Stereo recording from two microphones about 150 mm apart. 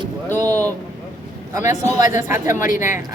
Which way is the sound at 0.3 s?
15° left (ahead or behind).